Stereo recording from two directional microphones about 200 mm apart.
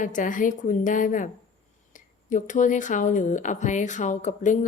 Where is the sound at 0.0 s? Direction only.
40° left (ahead or behind).